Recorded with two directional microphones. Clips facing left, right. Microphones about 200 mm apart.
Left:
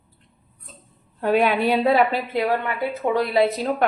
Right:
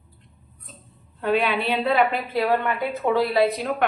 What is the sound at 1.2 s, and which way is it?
Speech, 40° left (ahead or behind).